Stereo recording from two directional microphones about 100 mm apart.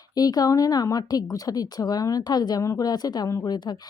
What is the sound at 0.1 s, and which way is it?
Speech, 40° left (ahead or behind).